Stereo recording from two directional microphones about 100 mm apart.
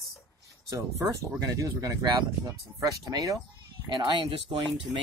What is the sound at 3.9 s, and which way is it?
Speech, 50° right (ahead or behind).